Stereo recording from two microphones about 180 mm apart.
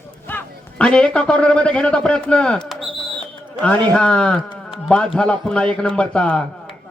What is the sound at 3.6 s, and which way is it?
A man's voice, 5° left (ahead or behind).